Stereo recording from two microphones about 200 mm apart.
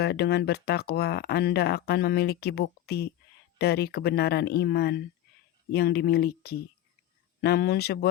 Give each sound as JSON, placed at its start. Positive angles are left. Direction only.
{"t": 0.0, "sound": "speech", "side_deg": 55}